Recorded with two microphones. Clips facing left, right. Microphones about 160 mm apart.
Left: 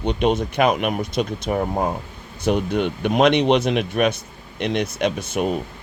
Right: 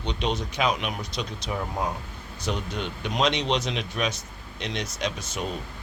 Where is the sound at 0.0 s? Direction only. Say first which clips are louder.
Left 9 dB; 55° left (ahead or behind).